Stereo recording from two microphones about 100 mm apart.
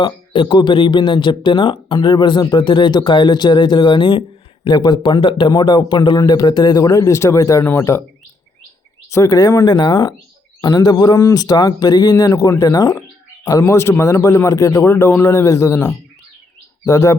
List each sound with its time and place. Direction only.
0.0 s a man's voice: 55° left (ahead or behind); by 7.6 s 30° left (ahead or behind)
7.6 s a man's voice: 20° left (ahead or behind)
9.0 s a man's voice: 30° left (ahead or behind)
9.6 s speech: 50° left (ahead or behind)
11.2 s a man's voice: 30° left (ahead or behind)
11.4 s a man's voice: 40° left (ahead or behind)